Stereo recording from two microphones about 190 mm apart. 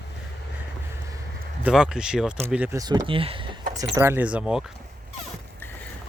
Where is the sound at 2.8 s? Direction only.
20° right (ahead or behind).